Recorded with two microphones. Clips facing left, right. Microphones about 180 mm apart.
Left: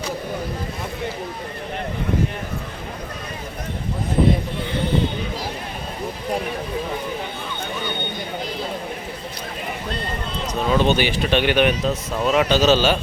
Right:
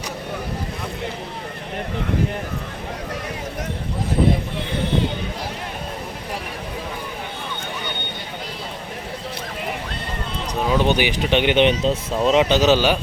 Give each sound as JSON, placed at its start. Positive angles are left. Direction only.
{"t": 10.7, "sound": "speech", "side_deg": -15}